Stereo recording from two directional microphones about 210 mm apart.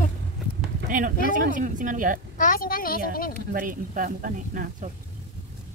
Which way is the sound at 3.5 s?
40° right (ahead or behind).